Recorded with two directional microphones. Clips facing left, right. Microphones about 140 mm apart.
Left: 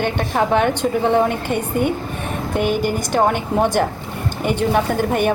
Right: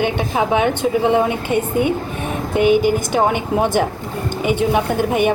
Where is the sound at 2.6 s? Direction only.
45° left (ahead or behind).